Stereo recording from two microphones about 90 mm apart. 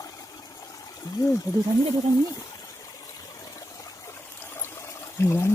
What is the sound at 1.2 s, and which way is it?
Speech, 40° left (ahead or behind).